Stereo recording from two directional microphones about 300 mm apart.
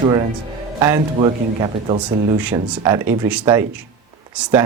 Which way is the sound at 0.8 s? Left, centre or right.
Centre.